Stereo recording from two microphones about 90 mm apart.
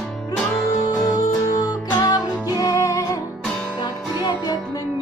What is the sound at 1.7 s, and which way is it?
Music, 45° left (ahead or behind).